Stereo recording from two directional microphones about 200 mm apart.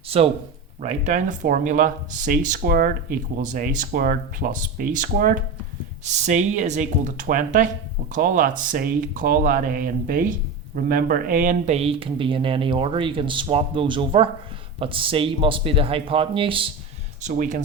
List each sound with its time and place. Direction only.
0.1 s speech: 30° right (ahead or behind); by 5.4 s 45° right (ahead or behind)
6.1 s speech: 35° right (ahead or behind)
17.2 s speech: 40° right (ahead or behind)